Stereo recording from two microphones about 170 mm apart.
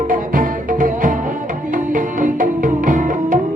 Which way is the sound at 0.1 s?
50° right (ahead or behind).